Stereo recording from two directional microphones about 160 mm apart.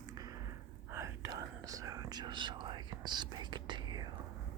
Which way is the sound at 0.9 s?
20° right (ahead or behind).